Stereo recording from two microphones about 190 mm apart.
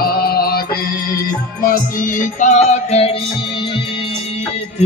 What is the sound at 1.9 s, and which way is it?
Music, 45° left (ahead or behind).